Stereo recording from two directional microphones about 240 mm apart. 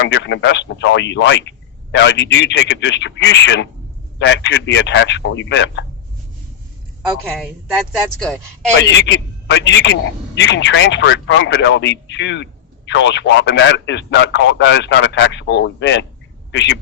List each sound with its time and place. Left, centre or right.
0.0 s speech: left
7.3 s speech: centre
8.8 s speech: left